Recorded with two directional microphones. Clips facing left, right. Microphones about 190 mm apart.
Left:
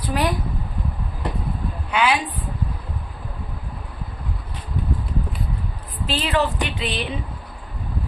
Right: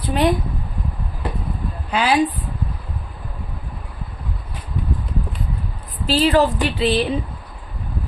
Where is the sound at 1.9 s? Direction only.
35° right (ahead or behind).